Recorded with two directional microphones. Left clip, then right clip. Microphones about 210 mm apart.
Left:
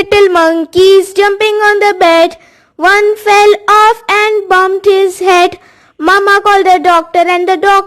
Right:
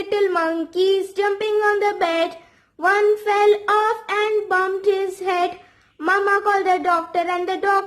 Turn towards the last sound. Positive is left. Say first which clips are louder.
# left 12 dB
turn(degrees=45)  # may be behind; listen again after turning